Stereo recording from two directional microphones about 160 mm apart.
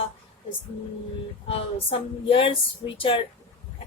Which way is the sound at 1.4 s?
35° left (ahead or behind).